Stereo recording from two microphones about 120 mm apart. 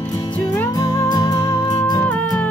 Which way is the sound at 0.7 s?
30° left (ahead or behind).